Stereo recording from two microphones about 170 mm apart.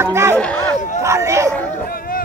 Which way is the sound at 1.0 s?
15° right (ahead or behind).